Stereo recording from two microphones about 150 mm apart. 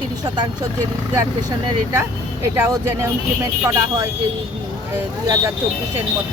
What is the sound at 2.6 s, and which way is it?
Speech, 15° right (ahead or behind).